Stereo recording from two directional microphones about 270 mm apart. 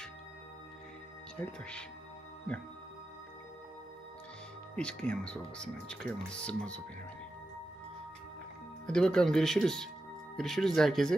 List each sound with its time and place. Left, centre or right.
1.4 s speech: centre
4.8 s speech: centre
8.9 s speech: centre